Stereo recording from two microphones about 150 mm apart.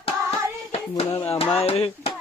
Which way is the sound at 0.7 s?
40° left (ahead or behind).